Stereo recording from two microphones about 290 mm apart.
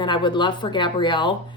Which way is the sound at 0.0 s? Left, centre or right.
Centre.